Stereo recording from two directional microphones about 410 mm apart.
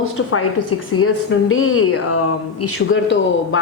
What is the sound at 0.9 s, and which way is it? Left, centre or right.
A woman's voice, left.